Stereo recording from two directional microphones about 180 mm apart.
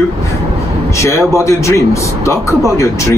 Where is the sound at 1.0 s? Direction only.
15° left (ahead or behind).